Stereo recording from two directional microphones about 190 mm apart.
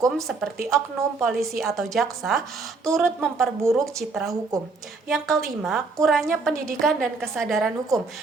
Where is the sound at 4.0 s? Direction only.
Centre (ahead or behind).